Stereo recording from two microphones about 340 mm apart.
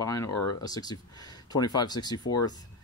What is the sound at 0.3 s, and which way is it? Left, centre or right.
Speech, left.